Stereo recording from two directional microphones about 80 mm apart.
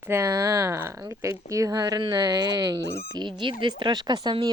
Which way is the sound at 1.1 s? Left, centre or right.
Right.